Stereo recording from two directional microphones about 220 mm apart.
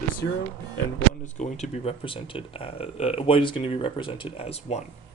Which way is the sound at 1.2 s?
30° left (ahead or behind).